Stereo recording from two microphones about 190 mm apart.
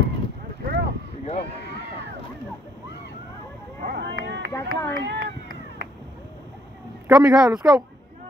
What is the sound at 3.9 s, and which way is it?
Run, 65° right (ahead or behind).